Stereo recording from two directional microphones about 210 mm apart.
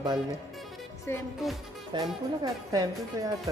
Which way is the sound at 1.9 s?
20° right (ahead or behind).